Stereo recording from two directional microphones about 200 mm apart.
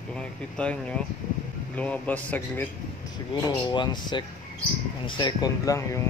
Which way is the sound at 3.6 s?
20° left (ahead or behind).